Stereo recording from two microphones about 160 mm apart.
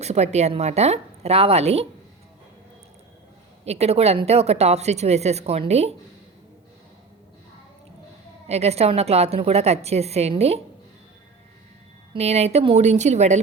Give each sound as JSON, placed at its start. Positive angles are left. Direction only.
{"t": 0.0, "sound": "a woman's voice", "side_deg": -45}
{"t": 3.6, "sound": "a woman's voice", "side_deg": -40}
{"t": 8.4, "sound": "a woman's voice", "side_deg": -40}
{"t": 12.1, "sound": "speech", "side_deg": -40}